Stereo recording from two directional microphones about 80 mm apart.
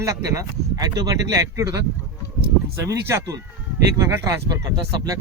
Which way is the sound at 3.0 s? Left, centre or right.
Right.